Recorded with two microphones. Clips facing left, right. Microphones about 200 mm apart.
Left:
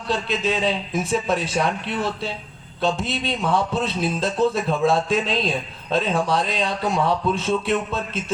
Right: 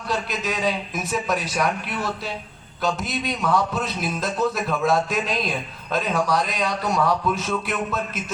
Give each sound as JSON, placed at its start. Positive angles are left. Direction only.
{"t": 0.1, "sound": "a man's voice", "side_deg": 30}